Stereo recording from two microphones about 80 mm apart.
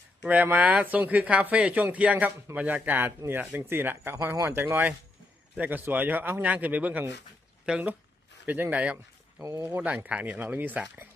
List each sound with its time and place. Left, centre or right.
0.2 s speech: centre
9.4 s speech: right
9.6 s speech: right